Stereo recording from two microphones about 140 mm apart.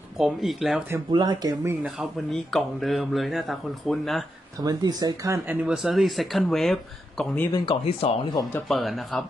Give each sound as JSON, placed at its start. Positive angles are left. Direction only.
{"t": 0.2, "sound": "speech", "side_deg": 0}
{"t": 1.1, "sound": "speech", "side_deg": -30}
{"t": 1.7, "sound": "speech", "side_deg": -5}
{"t": 4.6, "sound": "speech", "side_deg": -25}
{"t": 5.6, "sound": "speech", "side_deg": -5}
{"t": 7.5, "sound": "speech", "side_deg": 40}
{"t": 8.6, "sound": "speech", "side_deg": 0}